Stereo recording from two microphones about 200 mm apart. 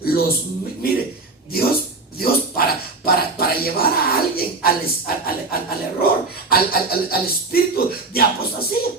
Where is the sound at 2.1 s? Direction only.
50° left (ahead or behind).